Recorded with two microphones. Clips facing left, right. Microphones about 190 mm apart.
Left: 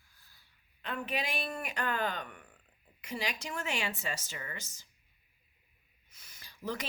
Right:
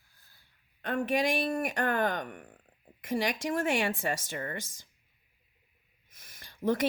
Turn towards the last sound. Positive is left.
turn(degrees=-50)  # may be behind; listen again after turning